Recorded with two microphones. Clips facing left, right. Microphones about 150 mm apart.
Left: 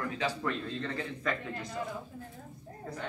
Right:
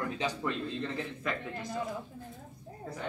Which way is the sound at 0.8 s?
5° right (ahead or behind).